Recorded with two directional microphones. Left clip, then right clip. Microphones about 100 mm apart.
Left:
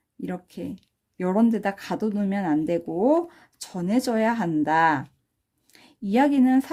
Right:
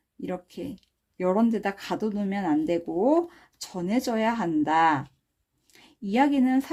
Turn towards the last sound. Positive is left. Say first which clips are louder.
# left 3 dB
turn(degrees=25)  # may be behind; listen again after turning